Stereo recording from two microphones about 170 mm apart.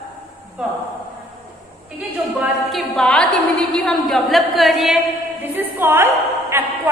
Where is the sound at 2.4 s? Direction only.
Centre (ahead or behind).